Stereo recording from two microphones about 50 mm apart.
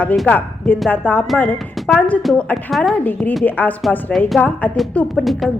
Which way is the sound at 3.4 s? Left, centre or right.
Left.